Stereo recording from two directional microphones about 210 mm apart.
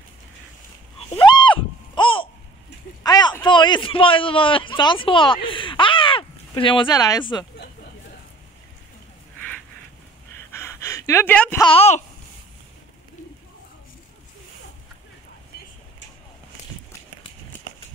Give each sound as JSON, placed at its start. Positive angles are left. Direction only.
{"t": 1.2, "sound": "a sound", "side_deg": 20}
{"t": 3.4, "sound": "a man's voice", "side_deg": 20}
{"t": 10.5, "sound": "gasp", "side_deg": 10}
{"t": 11.6, "sound": "speech", "side_deg": 30}